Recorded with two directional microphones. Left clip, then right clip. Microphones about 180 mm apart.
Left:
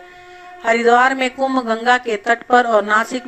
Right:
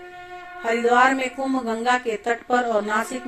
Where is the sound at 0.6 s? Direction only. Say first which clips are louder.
Left 5 dB; 35° left (ahead or behind).